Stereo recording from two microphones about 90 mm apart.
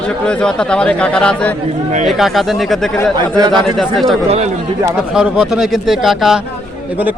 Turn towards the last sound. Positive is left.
turn(degrees=-5)  # may be behind; listen again after turning